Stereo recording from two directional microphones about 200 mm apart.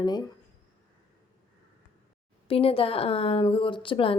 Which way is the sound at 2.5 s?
30° left (ahead or behind).